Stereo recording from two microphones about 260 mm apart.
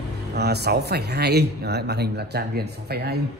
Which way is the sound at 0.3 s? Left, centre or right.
Right.